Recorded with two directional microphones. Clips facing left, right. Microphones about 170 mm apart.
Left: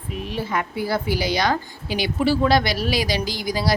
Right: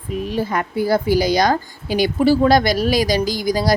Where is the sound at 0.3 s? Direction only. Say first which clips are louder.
Right 3 dB; 40° right (ahead or behind).